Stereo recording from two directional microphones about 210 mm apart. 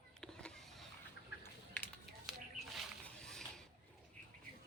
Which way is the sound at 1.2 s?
55° left (ahead or behind).